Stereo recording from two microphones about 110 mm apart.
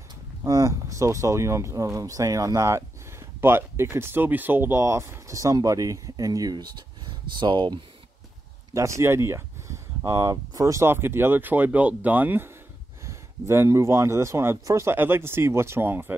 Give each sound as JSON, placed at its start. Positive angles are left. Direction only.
{"t": 0.4, "sound": "speech", "side_deg": -35}
{"t": 8.7, "sound": "speech", "side_deg": -25}